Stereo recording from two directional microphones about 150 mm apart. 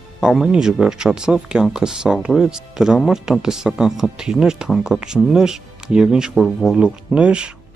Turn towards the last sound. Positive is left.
turn(degrees=-5)  # may be behind; listen again after turning